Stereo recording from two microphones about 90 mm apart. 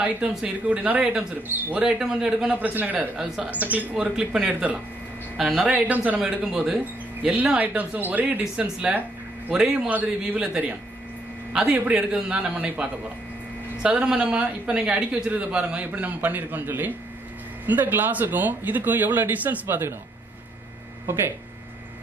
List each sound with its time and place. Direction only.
0.0 s a man's voice: 15° right (ahead or behind)
2.0 s a man's voice: 5° right (ahead or behind)
2.6 s a man's voice: 20° right (ahead or behind)
5.7 s a man's voice: 20° right (ahead or behind)
13.8 s a man's voice: 15° right (ahead or behind)